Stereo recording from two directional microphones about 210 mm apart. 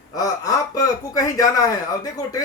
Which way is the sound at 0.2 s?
15° left (ahead or behind).